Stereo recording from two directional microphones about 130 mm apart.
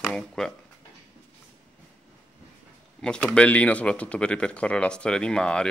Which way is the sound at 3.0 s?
5° left (ahead or behind).